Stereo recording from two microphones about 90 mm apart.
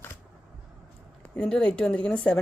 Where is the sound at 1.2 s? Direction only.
10° left (ahead or behind).